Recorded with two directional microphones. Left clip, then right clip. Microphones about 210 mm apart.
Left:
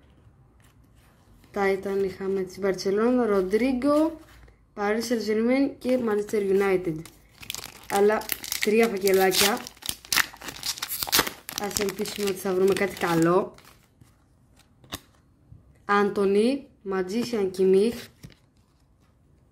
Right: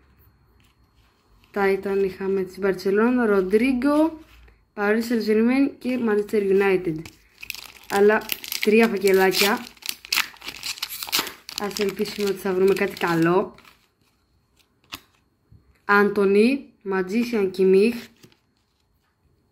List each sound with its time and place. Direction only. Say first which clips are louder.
1.5 s a woman's voice: right 3 dB; 10° left (ahead or behind)
10.4 s crumpling: right 2 dB; 20° left (ahead or behind)
11.6 s speech: right 4 dB; 15° left (ahead or behind)
15.8 s speech: right 4 dB; 5° left (ahead or behind)